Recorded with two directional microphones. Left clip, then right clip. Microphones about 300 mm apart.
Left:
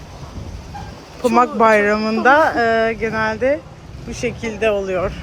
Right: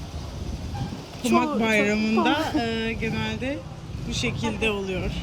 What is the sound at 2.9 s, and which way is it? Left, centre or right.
Speech, left.